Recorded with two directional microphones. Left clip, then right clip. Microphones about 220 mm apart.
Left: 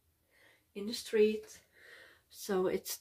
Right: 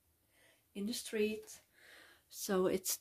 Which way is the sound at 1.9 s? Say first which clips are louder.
Right 1 dB; 45° right (ahead or behind).